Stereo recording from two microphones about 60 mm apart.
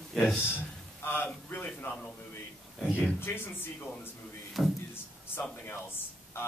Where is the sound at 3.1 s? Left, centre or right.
Left.